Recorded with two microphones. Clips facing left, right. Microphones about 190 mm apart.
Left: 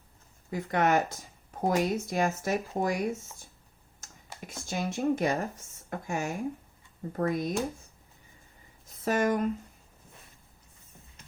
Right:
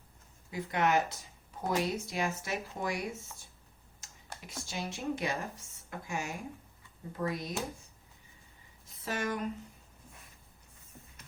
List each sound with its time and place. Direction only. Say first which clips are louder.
0.5 s speech: left 4 dB; 45° left (ahead or behind)
4.4 s speech: left 6 dB; 50° left (ahead or behind)
9.0 s speech: left 8 dB; 45° left (ahead or behind)